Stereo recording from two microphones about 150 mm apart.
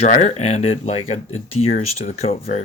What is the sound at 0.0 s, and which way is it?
Speech, 50° left (ahead or behind).